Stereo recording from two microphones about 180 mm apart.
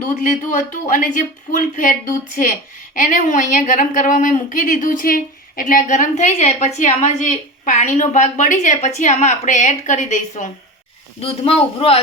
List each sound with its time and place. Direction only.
0.3 s a woman's voice: 45° left (ahead or behind)